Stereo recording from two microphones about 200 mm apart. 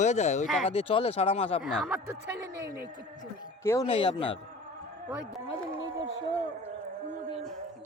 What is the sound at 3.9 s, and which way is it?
Speech, 25° left (ahead or behind).